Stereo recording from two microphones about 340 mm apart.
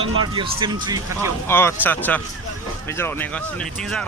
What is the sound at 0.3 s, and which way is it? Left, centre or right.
Speech, centre.